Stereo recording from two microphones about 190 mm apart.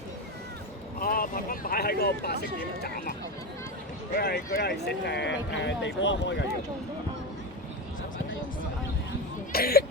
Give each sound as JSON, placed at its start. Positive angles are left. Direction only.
{"t": 0.9, "sound": "speech", "side_deg": 50}
{"t": 4.2, "sound": "speech", "side_deg": 55}
{"t": 9.5, "sound": "speech", "side_deg": 55}